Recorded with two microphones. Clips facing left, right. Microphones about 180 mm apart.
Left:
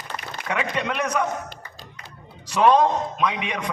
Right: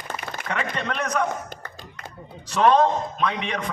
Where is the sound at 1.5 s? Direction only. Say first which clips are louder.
Right 3 dB; 50° right (ahead or behind).